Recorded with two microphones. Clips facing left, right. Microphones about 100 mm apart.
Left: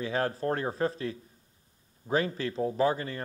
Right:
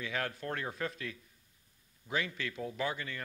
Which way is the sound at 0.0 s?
35° left (ahead or behind).